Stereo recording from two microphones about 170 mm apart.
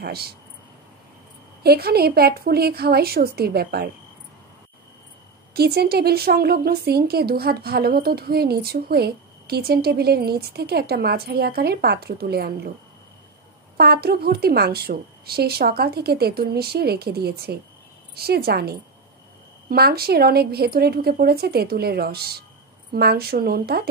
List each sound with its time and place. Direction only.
0.0 s a woman's voice: 65° right (ahead or behind)
1.6 s a woman's voice: 65° right (ahead or behind)
5.5 s a woman's voice: 65° right (ahead or behind)
13.7 s a woman's voice: 65° right (ahead or behind)